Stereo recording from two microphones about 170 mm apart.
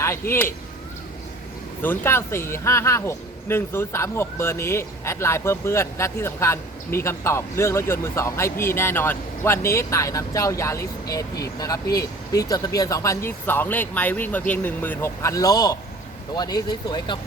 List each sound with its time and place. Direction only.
0.0 s speech: 15° left (ahead or behind)
1.8 s speech: 15° left (ahead or behind)